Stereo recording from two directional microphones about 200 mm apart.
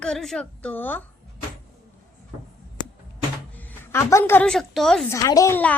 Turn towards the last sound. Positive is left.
turn(degrees=10)  # may be behind; listen again after turning